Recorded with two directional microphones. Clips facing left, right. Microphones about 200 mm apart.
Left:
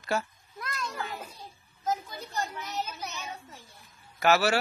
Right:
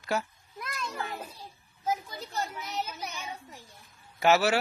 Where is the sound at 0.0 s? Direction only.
5° right (ahead or behind).